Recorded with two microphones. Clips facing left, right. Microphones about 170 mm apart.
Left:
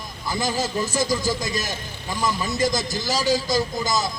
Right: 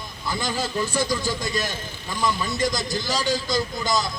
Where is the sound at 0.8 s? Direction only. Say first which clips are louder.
Left 1 dB; 40° left (ahead or behind).